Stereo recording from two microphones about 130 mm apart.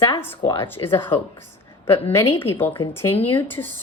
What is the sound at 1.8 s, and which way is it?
A woman's voice, 20° left (ahead or behind).